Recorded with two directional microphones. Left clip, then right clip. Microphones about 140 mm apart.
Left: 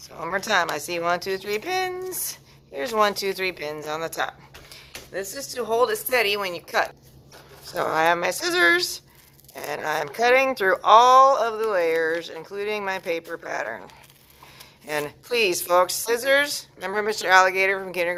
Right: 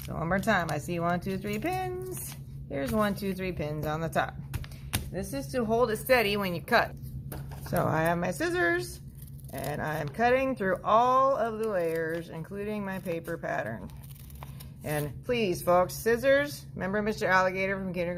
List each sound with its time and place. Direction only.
0.2 s speech: 20° left (ahead or behind)
2.9 s speech: 30° left (ahead or behind); by 6.9 s centre (ahead or behind)
7.8 s speech: 20° left (ahead or behind)
14.8 s speech: 20° left (ahead or behind)